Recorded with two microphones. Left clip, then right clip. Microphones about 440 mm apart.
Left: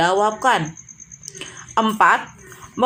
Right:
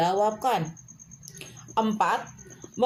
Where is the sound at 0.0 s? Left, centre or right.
Right.